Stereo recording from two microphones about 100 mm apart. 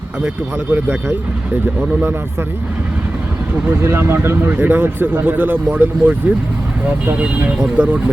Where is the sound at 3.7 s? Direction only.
25° right (ahead or behind).